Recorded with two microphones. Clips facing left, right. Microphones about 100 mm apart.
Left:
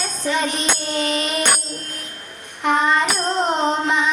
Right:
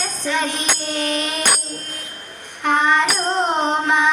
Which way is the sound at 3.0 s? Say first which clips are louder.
Even; 20° right (ahead or behind).